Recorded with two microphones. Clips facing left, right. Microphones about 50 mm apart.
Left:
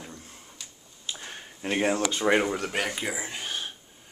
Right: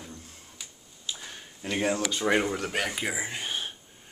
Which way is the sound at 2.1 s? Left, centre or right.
Centre.